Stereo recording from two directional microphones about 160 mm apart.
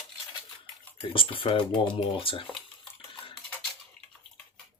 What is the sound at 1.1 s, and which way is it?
Speech, 35° left (ahead or behind).